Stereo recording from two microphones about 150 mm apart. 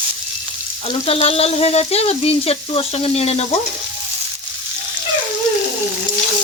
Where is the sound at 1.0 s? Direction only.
40° left (ahead or behind).